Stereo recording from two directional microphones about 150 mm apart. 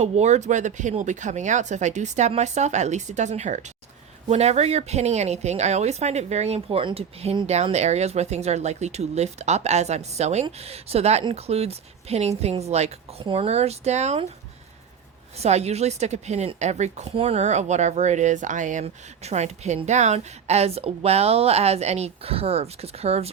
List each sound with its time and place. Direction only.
0.0 s a woman's voice: 50° right (ahead or behind)
15.4 s a woman's voice: 45° right (ahead or behind)